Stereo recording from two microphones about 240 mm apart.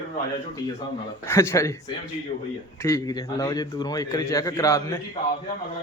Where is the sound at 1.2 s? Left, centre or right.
Centre.